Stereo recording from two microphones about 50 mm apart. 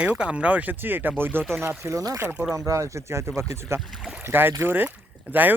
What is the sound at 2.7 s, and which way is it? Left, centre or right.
Speech, right.